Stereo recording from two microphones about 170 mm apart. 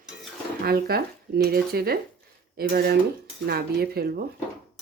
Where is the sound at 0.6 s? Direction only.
65° right (ahead or behind).